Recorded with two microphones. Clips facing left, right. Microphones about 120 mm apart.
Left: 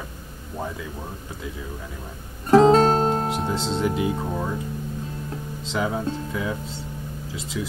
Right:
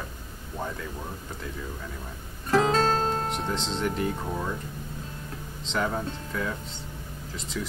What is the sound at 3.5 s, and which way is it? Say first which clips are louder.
Speech: left 5 dB; 5° left (ahead or behind).